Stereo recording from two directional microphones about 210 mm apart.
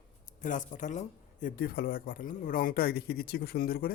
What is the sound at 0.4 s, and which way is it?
Speech, 40° left (ahead or behind).